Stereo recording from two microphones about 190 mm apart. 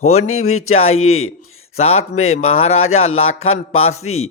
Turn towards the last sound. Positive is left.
turn(degrees=90)